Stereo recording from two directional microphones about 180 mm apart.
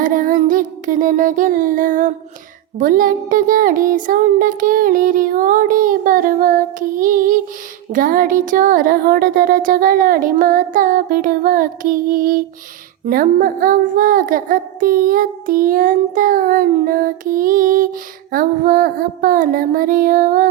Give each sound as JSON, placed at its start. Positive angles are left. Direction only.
{"t": 0.0, "sound": "child singing", "side_deg": -50}